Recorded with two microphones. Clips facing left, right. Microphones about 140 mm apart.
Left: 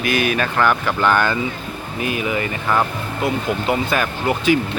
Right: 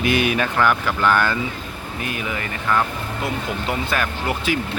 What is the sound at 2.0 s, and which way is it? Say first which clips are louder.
Speech: left 6 dB; 10° left (ahead or behind).